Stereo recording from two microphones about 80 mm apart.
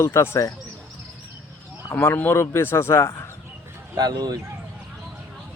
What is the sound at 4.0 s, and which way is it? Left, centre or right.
Speech, right.